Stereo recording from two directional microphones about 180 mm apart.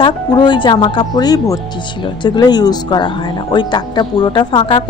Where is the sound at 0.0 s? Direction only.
25° left (ahead or behind).